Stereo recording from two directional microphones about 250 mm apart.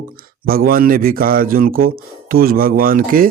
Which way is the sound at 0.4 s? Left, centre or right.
Right.